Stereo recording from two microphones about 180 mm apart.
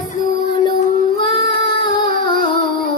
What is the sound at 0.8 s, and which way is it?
Child singing, 45° left (ahead or behind).